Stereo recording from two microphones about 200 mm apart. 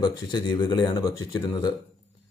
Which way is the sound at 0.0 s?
20° left (ahead or behind).